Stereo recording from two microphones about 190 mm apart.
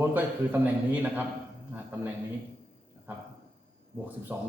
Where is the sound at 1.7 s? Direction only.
10° right (ahead or behind).